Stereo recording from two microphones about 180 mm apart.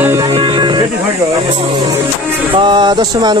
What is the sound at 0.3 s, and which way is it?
Music, 25° right (ahead or behind).